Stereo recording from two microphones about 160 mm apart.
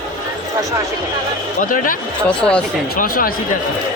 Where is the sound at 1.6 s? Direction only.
60° left (ahead or behind).